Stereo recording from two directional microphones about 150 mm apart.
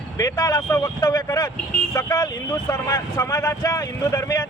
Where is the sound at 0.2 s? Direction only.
25° left (ahead or behind).